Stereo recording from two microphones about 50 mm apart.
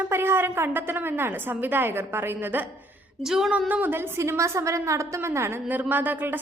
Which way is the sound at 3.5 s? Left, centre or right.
Right.